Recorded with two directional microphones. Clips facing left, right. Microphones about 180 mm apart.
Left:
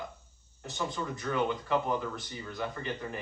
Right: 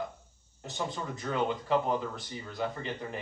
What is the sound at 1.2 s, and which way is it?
Speech, 25° right (ahead or behind).